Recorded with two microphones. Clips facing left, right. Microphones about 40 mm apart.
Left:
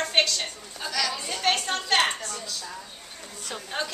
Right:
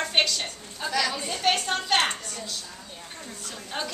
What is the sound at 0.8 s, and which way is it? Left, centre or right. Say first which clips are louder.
Speech: right 2 dB; right.